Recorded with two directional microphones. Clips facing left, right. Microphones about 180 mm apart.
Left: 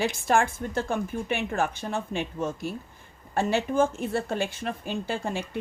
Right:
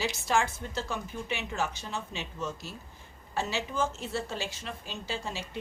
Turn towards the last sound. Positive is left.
turn(degrees=55)  # may be behind; listen again after turning